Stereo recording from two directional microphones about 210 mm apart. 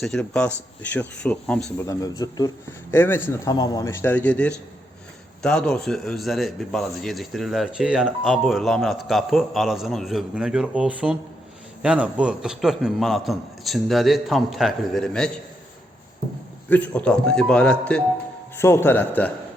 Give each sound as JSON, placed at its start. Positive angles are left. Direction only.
{"t": 0.0, "sound": "a man's voice", "side_deg": 5}
{"t": 1.8, "sound": "a man's voice", "side_deg": 15}
{"t": 16.6, "sound": "a man's voice", "side_deg": 10}